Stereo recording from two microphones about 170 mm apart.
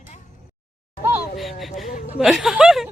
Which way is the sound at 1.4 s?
Centre (ahead or behind).